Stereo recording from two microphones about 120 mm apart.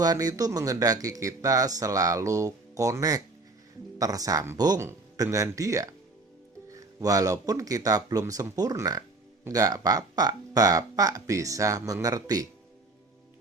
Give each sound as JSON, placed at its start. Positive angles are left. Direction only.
{"t": 0.0, "sound": "speech", "side_deg": -30}